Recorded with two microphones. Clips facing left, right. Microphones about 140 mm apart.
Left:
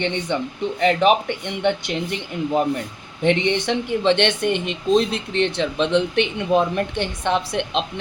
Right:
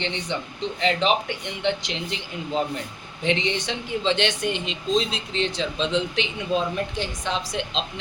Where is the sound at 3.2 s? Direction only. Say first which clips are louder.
Left 6 dB; 60° left (ahead or behind).